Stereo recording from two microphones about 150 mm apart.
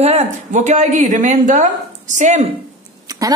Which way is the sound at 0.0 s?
50° right (ahead or behind).